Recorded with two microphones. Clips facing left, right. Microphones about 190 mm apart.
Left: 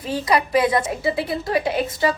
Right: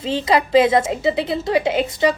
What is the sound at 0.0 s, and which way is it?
A woman's voice, 25° right (ahead or behind).